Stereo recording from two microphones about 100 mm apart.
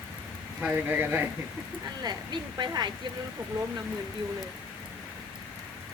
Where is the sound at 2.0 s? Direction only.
45° right (ahead or behind).